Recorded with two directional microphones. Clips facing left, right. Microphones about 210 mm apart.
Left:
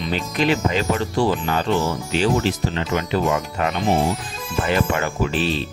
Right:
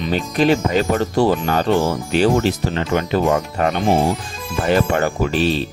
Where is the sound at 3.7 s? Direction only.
50° right (ahead or behind).